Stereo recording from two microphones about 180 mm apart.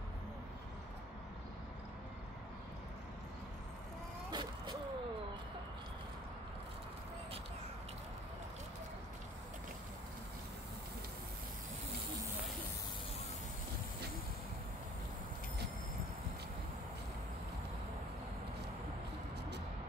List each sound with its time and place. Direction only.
4.3 s vehicle: 25° right (ahead or behind)